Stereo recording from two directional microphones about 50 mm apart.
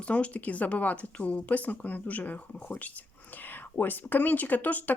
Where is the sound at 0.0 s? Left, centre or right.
Left.